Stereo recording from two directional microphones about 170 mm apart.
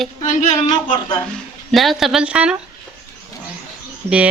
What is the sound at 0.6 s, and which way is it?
Speech, 30° left (ahead or behind).